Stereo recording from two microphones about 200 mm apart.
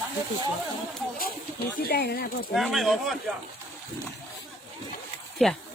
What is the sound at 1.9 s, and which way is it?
Speech, 50° left (ahead or behind).